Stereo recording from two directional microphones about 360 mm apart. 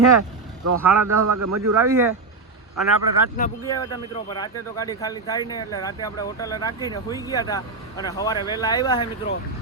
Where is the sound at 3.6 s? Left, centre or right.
Centre.